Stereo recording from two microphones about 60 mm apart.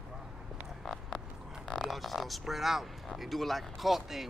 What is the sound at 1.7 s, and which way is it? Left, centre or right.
Speech, centre.